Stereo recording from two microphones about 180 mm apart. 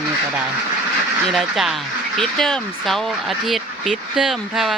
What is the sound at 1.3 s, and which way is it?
Speech, centre (ahead or behind).